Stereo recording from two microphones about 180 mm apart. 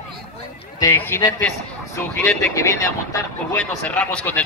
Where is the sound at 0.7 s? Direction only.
15° left (ahead or behind).